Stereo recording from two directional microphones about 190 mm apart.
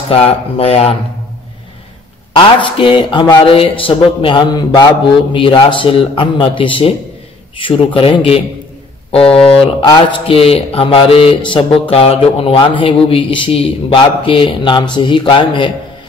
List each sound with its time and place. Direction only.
0.1 s speech: 30° left (ahead or behind)
2.3 s a man's voice: 25° left (ahead or behind)